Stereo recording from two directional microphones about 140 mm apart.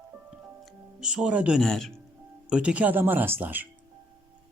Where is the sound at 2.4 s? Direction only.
10° right (ahead or behind).